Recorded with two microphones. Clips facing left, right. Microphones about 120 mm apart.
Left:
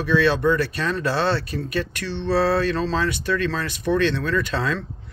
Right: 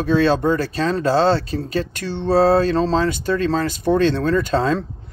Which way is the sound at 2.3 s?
30° right (ahead or behind).